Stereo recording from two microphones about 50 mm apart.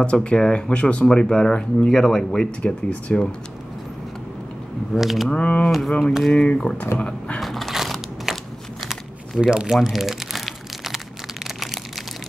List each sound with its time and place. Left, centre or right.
0.0 s speech: left; by 2.4 s centre
2.4 s speech: left
4.9 s speech: centre
5.3 s speech: left
7.3 s a sound: centre
9.4 s speech: centre
9.8 s crumpling: centre
11.4 s a sound: centre